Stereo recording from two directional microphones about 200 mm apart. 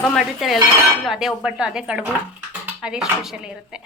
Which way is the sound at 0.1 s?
Centre (ahead or behind).